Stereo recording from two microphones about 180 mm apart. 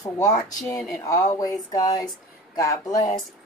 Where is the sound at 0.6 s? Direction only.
5° left (ahead or behind).